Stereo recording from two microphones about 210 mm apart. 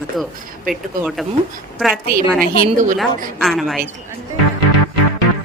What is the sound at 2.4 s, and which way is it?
Speech, 45° right (ahead or behind).